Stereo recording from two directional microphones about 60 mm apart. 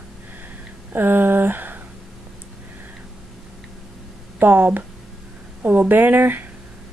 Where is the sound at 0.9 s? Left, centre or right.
Right.